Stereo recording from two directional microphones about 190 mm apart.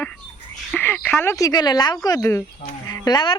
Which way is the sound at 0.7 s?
10° left (ahead or behind).